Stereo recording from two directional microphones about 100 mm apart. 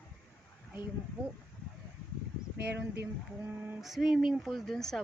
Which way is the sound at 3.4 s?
20° right (ahead or behind).